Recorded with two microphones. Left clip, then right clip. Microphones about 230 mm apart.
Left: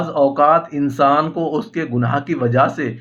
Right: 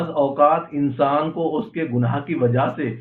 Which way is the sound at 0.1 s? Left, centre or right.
Left.